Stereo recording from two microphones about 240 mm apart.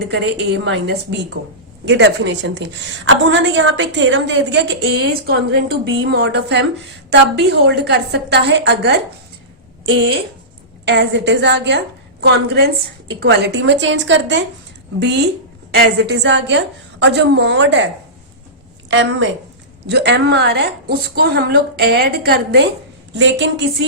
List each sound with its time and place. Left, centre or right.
0.0 s a woman's voice: right
18.9 s a woman's voice: right